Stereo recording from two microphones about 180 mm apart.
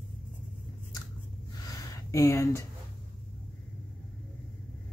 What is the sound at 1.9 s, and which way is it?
Speech, 20° left (ahead or behind).